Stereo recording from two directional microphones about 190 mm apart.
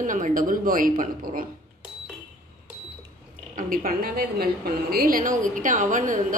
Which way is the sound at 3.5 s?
45° right (ahead or behind).